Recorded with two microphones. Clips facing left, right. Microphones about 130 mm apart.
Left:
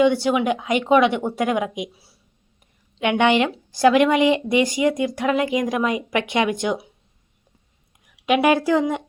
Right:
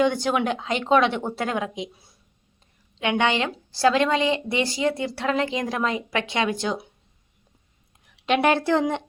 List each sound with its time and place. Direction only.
0.0 s a woman's voice: 10° left (ahead or behind)
3.0 s a woman's voice: 15° left (ahead or behind)
8.0 s speech: 10° left (ahead or behind)